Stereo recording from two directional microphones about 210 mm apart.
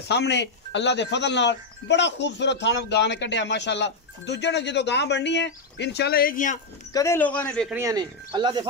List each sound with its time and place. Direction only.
0.1 s speech: 55° left (ahead or behind); by 6.6 s 40° left (ahead or behind)
6.9 s speech: 15° left (ahead or behind)
7.7 s speech: 15° right (ahead or behind)